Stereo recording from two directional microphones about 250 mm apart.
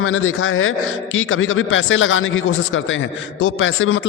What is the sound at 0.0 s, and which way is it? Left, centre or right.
Speech, left.